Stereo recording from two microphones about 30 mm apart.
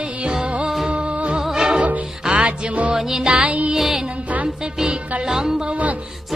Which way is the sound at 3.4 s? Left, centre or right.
Right.